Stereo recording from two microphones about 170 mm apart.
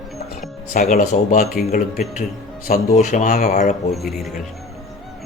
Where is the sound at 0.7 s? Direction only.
50° left (ahead or behind).